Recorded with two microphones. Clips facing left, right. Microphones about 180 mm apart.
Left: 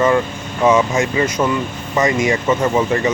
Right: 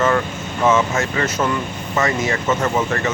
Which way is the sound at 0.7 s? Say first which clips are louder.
Left 3 dB; 15° left (ahead or behind).